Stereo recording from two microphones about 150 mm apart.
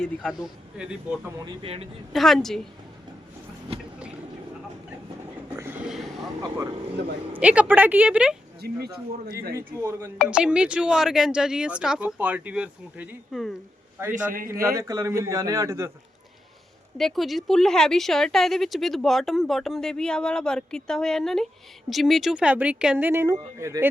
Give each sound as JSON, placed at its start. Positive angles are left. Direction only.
{"t": 0.0, "sound": "a woman's voice", "side_deg": 0}
{"t": 1.6, "sound": "speech", "side_deg": -40}
{"t": 2.1, "sound": "a woman's voice", "side_deg": 0}
{"t": 5.5, "sound": "a sound", "side_deg": -15}
{"t": 7.3, "sound": "speech", "side_deg": -10}
{"t": 8.6, "sound": "speech", "side_deg": -85}
{"t": 9.6, "sound": "speech", "side_deg": -15}
{"t": 10.2, "sound": "speech", "side_deg": -5}
{"t": 14.3, "sound": "a man's voice", "side_deg": -70}
{"t": 14.6, "sound": "a man's voice", "side_deg": -20}
{"t": 17.0, "sound": "a woman's voice", "side_deg": 0}